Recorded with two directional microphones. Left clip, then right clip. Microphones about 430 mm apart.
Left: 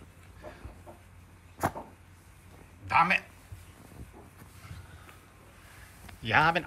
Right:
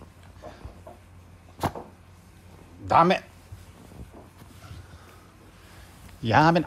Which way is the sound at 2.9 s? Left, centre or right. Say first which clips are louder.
Right 5 dB; centre.